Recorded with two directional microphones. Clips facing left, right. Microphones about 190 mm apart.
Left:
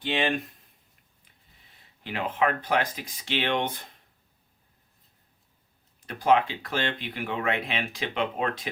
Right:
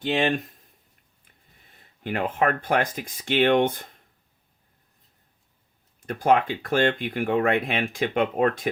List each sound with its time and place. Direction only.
0.0 s speech: 45° right (ahead or behind)
1.7 s speech: 50° right (ahead or behind)
6.1 s speech: 50° right (ahead or behind)